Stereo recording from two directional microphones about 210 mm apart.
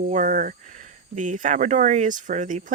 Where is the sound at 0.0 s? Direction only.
40° right (ahead or behind).